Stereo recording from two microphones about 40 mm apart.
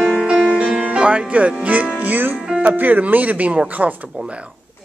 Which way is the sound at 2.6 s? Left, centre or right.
Right.